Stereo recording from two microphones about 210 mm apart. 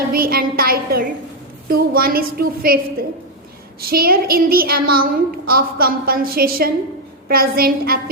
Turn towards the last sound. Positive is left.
turn(degrees=-45)  # may be behind; listen again after turning